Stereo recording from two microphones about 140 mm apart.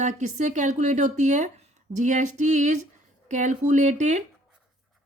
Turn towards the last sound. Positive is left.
turn(degrees=-60)  # may be behind; listen again after turning